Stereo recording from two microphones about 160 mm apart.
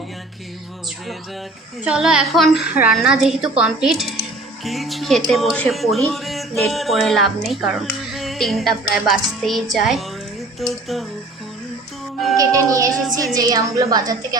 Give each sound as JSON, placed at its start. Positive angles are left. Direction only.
{"t": 1.8, "sound": "speech", "side_deg": -5}
{"t": 12.4, "sound": "a woman's voice", "side_deg": -20}
{"t": 13.0, "sound": "speech", "side_deg": 0}
{"t": 13.3, "sound": "a woman's voice", "side_deg": -20}